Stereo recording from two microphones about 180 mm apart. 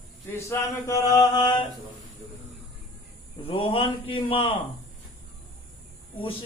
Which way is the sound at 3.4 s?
30° left (ahead or behind).